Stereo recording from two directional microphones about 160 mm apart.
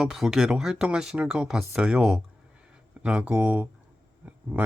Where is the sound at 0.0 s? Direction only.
Centre (ahead or behind).